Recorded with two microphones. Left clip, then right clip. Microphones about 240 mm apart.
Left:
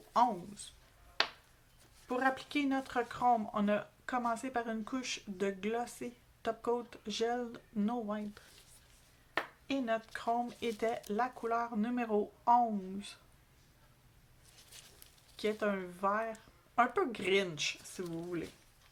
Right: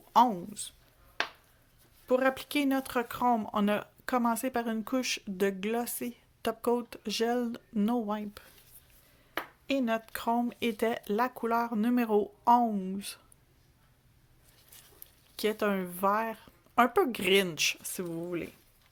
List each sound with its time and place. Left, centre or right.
0.1 s speech: right
2.0 s speech: right
9.6 s speech: right
15.4 s speech: right